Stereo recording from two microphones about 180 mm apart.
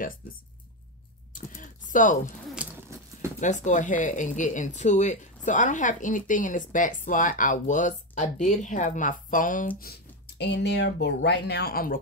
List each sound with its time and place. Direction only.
1.3 s typing: 45° left (ahead or behind)
3.3 s speech: 40° left (ahead or behind)
9.8 s speech: 65° left (ahead or behind)